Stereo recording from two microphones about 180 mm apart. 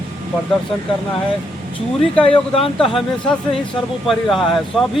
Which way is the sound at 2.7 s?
5° left (ahead or behind).